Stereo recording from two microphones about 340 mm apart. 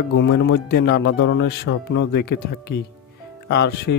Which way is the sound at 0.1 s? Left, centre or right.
Left.